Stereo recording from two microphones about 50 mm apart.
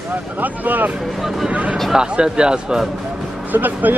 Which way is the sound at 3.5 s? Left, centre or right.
Right.